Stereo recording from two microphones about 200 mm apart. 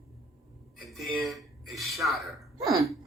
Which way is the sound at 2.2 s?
Centre (ahead or behind).